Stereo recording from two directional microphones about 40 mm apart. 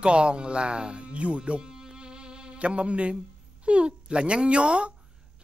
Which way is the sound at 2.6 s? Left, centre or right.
Right.